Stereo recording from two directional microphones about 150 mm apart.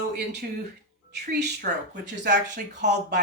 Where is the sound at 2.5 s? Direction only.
90° right.